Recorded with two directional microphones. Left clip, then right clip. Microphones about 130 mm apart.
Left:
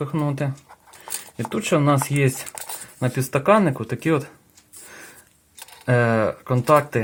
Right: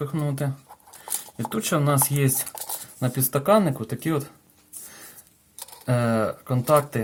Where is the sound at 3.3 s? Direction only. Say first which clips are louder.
Left 2 dB; 20° left (ahead or behind).